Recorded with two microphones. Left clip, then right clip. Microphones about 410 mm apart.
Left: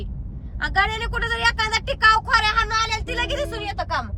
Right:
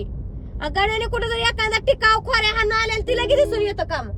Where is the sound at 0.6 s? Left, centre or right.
Centre.